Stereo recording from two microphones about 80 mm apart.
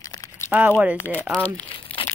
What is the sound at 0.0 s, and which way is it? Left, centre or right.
Crumpling, left.